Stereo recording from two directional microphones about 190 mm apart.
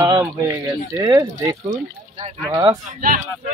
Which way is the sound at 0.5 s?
20° right (ahead or behind).